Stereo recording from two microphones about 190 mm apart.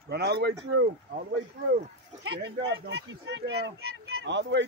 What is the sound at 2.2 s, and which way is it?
A man's voice, 60° right (ahead or behind).